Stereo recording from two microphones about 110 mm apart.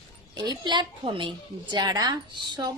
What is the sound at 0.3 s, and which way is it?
A woman's voice, 40° right (ahead or behind).